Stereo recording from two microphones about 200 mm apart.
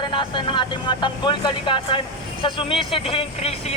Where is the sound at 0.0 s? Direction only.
25° left (ahead or behind).